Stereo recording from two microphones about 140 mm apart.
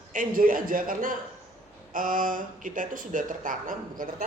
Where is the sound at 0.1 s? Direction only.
75° right (ahead or behind).